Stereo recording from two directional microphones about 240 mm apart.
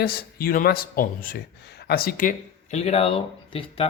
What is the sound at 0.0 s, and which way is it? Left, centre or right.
Speech, left.